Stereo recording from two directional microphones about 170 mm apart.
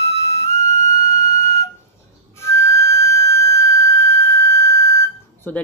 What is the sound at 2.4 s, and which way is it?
Whistle, 15° left (ahead or behind).